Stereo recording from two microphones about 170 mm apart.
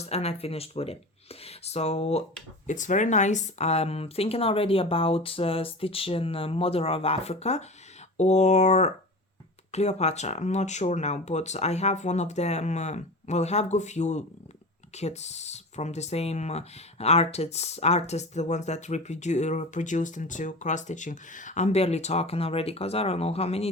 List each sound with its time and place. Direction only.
0.0 s speech: 40° left (ahead or behind)